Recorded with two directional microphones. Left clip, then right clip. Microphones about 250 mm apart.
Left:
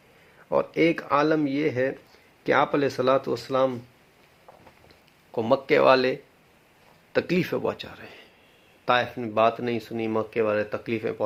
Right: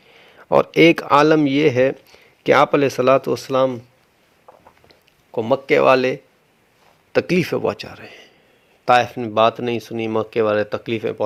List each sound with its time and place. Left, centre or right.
0.3 s speech: right
4.9 s speech: right